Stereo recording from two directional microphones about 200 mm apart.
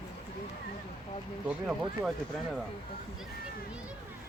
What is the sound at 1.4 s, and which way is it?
Speech, centre (ahead or behind).